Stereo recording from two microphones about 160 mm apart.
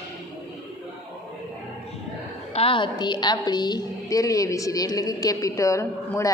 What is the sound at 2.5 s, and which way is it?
A woman's voice, 35° left (ahead or behind).